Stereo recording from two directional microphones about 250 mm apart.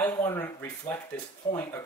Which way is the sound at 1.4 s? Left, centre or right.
Left.